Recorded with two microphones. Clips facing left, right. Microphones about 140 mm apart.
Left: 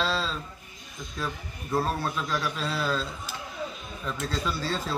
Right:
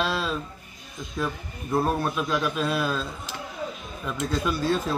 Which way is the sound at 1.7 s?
15° right (ahead or behind).